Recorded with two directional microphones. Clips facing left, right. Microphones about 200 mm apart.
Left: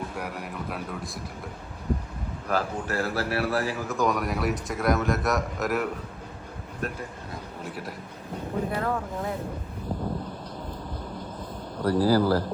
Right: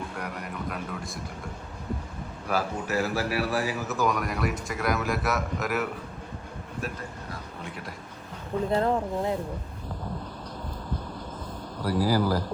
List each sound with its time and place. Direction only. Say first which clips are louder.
0.2 s speech: left 1 dB; 5° left (ahead or behind)
2.5 s speech: even; 10° right (ahead or behind)
7.6 s speech: left 5 dB; centre (ahead or behind)
8.7 s speech: right 4 dB; 25° right (ahead or behind)
11.9 s speech: left 3 dB; 10° right (ahead or behind)